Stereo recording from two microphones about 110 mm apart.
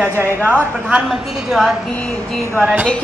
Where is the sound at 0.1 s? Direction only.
20° right (ahead or behind).